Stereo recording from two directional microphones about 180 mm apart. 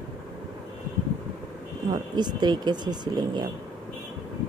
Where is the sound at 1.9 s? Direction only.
25° right (ahead or behind).